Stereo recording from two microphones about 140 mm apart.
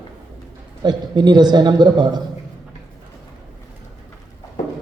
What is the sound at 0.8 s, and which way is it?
A man's voice, 30° right (ahead or behind).